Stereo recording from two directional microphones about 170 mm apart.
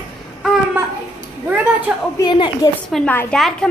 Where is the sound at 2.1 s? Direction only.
25° left (ahead or behind).